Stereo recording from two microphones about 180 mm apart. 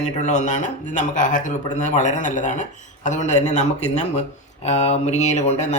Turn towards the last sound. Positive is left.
turn(degrees=40)  # may be behind; listen again after turning